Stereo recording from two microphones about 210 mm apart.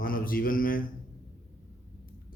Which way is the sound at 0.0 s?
45° left (ahead or behind).